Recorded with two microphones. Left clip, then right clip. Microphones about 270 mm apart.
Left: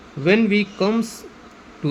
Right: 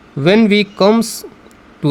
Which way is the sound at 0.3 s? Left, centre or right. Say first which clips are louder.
Right 6 dB; right.